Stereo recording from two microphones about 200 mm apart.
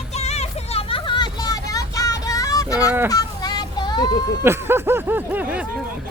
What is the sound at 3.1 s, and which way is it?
Child singing, 20° left (ahead or behind).